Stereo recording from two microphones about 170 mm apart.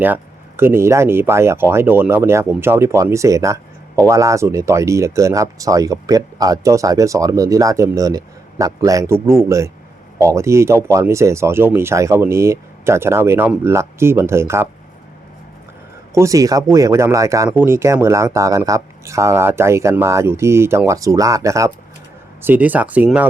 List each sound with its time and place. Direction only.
0.0 s speech: 10° right (ahead or behind)
16.1 s speech: 20° right (ahead or behind)